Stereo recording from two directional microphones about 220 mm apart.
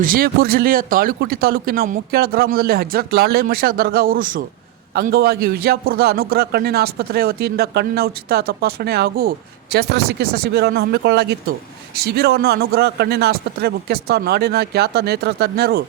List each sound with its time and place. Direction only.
0.0 s a man's voice: 40° right (ahead or behind)